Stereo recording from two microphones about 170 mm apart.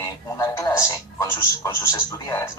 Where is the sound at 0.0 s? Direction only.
20° left (ahead or behind).